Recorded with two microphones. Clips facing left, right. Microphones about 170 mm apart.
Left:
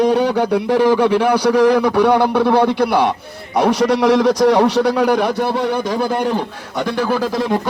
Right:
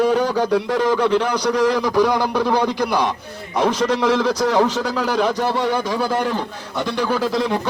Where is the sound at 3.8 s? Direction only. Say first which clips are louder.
Left 6 dB; 15° left (ahead or behind).